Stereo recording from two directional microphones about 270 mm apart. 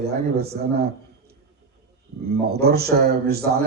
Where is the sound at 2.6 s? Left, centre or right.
Right.